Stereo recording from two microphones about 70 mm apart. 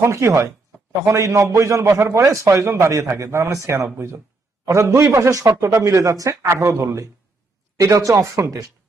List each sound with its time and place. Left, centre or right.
0.0 s a man's voice: right